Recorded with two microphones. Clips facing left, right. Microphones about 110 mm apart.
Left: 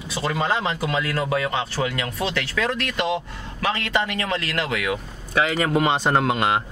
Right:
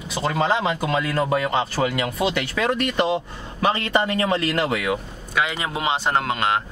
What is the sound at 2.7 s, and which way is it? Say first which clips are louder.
Speech: right 3 dB; 20° right (ahead or behind).